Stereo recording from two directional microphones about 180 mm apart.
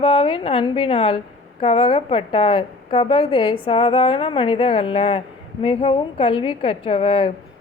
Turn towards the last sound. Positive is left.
turn(degrees=30)  # may be behind; listen again after turning